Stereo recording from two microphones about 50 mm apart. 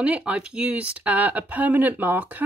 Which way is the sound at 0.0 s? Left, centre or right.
Right.